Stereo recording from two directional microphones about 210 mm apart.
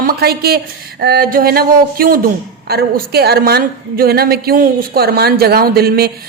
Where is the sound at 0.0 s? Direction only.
45° right (ahead or behind).